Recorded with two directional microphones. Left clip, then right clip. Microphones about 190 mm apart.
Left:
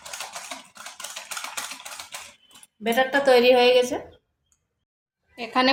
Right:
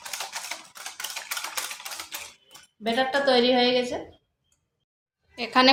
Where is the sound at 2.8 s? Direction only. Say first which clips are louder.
Left 3 dB; 35° left (ahead or behind).